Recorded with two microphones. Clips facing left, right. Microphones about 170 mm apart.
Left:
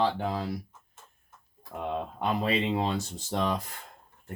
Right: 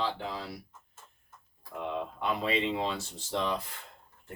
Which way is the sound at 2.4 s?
45° left (ahead or behind).